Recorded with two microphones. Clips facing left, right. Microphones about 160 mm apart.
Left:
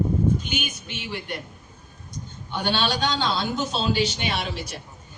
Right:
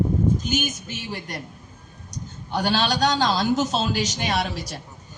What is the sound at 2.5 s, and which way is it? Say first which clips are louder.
A woman's voice: right 2 dB; 40° right (ahead or behind).